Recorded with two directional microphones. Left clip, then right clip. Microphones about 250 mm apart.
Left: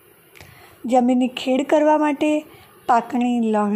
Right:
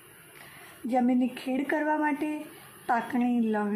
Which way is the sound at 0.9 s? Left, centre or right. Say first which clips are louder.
Left 9 dB; left.